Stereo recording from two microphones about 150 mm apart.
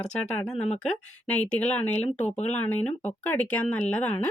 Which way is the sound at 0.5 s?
50° left (ahead or behind).